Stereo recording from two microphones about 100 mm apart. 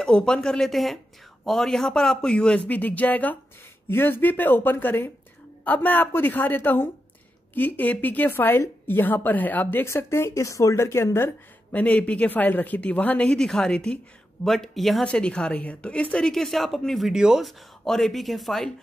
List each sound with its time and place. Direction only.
0.0 s a woman's voice: 10° left (ahead or behind)